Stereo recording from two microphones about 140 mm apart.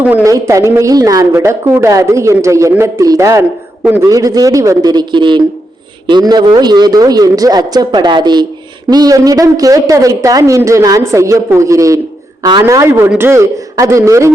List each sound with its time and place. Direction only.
0.0 s a woman's voice: 10° right (ahead or behind)
12.4 s a man's voice: 35° right (ahead or behind)
12.6 s a woman's voice: 20° right (ahead or behind)